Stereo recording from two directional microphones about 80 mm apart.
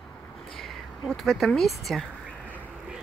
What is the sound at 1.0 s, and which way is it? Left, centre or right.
Speech, centre.